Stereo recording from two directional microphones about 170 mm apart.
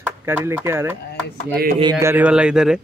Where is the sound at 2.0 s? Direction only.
10° right (ahead or behind).